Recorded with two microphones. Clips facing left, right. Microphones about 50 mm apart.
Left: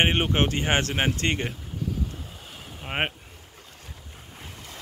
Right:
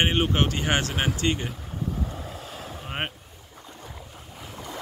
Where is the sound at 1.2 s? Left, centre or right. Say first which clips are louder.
Even; left.